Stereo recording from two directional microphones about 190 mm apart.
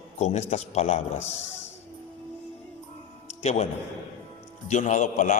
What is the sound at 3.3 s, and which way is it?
Music, 35° left (ahead or behind).